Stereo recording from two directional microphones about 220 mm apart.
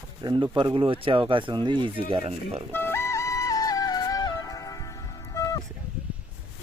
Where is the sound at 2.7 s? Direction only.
10° left (ahead or behind).